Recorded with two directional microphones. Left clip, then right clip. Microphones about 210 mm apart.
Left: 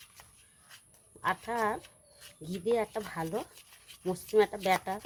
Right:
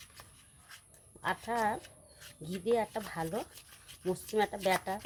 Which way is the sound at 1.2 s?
25° left (ahead or behind).